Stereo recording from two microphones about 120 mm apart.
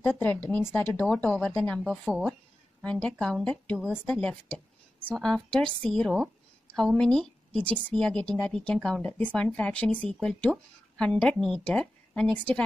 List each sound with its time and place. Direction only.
0.0 s speech: 15° left (ahead or behind)
1.9 s a woman's voice: 5° right (ahead or behind)
2.8 s a woman's voice: 10° left (ahead or behind)